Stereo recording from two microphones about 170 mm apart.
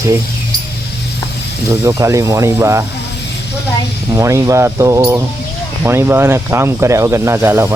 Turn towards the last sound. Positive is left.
turn(degrees=-15)  # may be behind; listen again after turning